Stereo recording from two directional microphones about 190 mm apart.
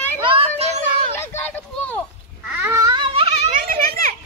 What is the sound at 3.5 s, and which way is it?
Children playing, 45° right (ahead or behind).